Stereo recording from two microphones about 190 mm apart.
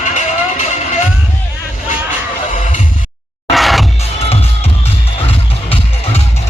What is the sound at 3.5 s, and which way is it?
Music, centre (ahead or behind).